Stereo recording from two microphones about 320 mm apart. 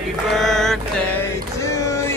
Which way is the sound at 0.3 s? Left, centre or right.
Centre.